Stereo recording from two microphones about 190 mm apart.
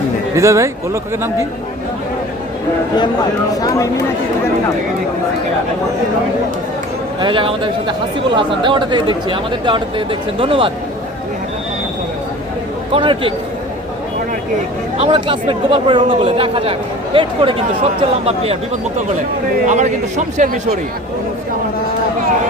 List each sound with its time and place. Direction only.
0.3 s speech: 15° right (ahead or behind)
3.5 s speech: 20° left (ahead or behind)
7.2 s speech: 25° right (ahead or behind)
12.9 s speech: 25° right (ahead or behind)
14.9 s a man's voice: 30° right (ahead or behind)
19.6 s a man's voice: 40° right (ahead or behind)